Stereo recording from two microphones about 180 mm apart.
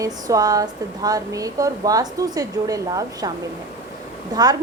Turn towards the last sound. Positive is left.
turn(degrees=-20)  # may be behind; listen again after turning